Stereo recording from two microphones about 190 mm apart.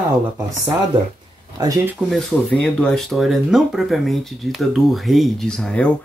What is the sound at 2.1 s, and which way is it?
Speech, 5° left (ahead or behind).